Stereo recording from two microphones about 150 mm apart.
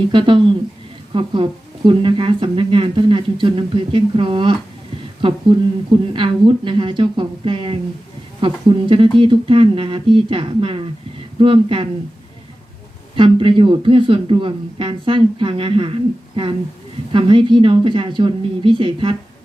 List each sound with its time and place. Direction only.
0.1 s speech: 30° right (ahead or behind)
6.1 s speech: 35° right (ahead or behind)
13.1 s speech: 35° right (ahead or behind)